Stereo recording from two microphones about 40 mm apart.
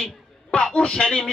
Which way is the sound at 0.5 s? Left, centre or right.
Left.